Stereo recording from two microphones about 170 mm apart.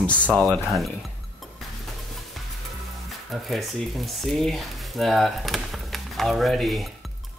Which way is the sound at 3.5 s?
Centre (ahead or behind).